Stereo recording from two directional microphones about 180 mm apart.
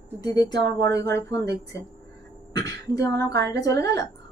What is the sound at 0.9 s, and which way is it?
Speech, 70° right (ahead or behind).